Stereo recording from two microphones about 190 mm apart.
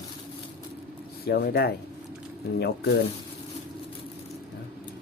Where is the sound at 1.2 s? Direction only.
55° left (ahead or behind).